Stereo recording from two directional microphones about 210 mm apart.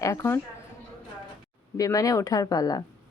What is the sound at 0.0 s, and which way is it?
Speech, 15° left (ahead or behind).